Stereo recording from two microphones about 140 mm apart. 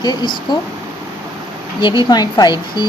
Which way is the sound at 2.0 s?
30° left (ahead or behind).